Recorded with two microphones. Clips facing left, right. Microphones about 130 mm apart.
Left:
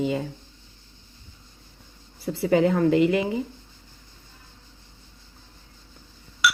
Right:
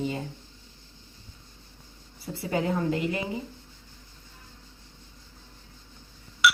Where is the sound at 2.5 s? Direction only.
85° left.